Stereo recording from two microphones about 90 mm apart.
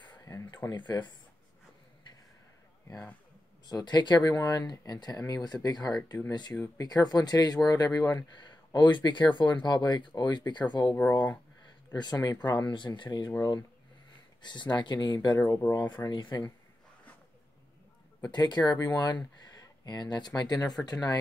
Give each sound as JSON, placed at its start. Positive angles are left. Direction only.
{"t": 0.7, "sound": "speech", "side_deg": 55}
{"t": 3.6, "sound": "speech", "side_deg": 50}
{"t": 8.3, "sound": "speech", "side_deg": 55}
{"t": 13.4, "sound": "speech", "side_deg": 40}
{"t": 14.4, "sound": "speech", "side_deg": 55}
{"t": 15.2, "sound": "speech", "side_deg": 40}
{"t": 18.2, "sound": "speech", "side_deg": 50}